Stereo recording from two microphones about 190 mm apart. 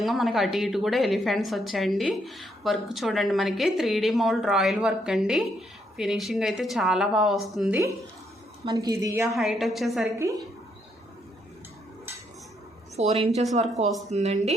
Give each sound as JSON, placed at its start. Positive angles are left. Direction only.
{"t": 0.0, "sound": "a woman's voice", "side_deg": 0}
{"t": 8.6, "sound": "a woman's voice", "side_deg": -20}
{"t": 9.3, "sound": "a woman's voice", "side_deg": 0}
{"t": 13.0, "sound": "speech", "side_deg": -35}